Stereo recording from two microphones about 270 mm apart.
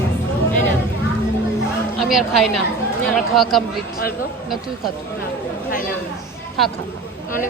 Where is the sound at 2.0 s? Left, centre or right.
Centre.